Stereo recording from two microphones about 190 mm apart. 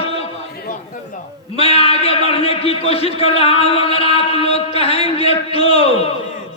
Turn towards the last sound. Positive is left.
turn(degrees=30)  # may be behind; listen again after turning